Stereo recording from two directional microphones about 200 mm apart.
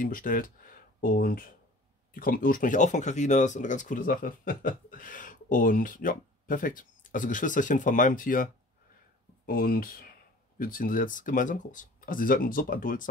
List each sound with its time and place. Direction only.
0.0 s speech: 45° left (ahead or behind)
9.5 s speech: 45° left (ahead or behind)